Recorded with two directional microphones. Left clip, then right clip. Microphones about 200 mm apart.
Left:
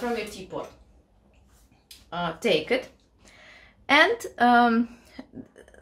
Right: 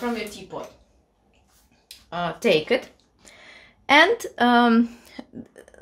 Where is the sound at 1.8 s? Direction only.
35° right (ahead or behind).